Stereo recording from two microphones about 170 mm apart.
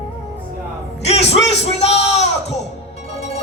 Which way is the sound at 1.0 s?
40° left (ahead or behind).